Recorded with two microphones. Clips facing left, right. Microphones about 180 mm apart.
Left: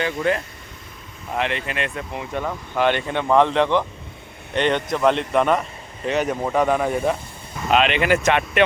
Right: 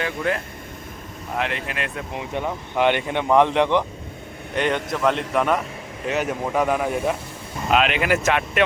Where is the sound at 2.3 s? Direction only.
15° right (ahead or behind).